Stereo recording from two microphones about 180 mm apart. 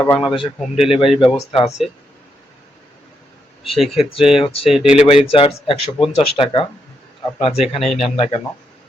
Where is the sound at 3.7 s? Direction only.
Centre (ahead or behind).